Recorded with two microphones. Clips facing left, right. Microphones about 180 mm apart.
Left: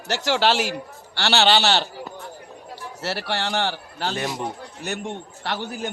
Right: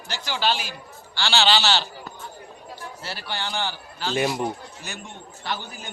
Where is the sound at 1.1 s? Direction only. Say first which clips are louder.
Left 3 dB; 65° left (ahead or behind).